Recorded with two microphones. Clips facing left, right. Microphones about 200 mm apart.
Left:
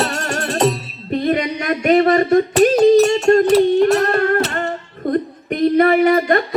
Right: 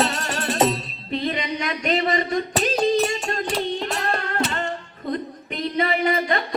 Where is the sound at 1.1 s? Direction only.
50° left (ahead or behind).